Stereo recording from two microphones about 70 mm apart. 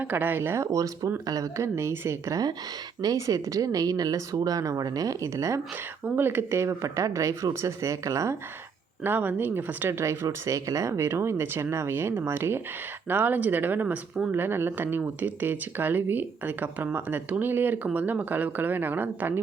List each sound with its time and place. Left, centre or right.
0.0 s speech: right
3.0 s speech: right
6.1 s speech: right
9.0 s speech: right
10.0 s speech: right